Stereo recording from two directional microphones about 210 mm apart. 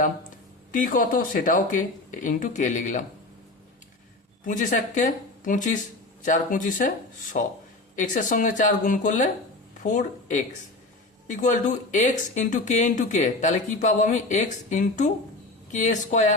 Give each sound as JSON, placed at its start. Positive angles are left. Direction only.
{"t": 0.7, "sound": "speech", "side_deg": 40}
{"t": 4.4, "sound": "speech", "side_deg": 40}